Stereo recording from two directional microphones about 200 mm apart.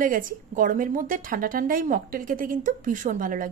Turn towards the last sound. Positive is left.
turn(degrees=-40)  # may be behind; listen again after turning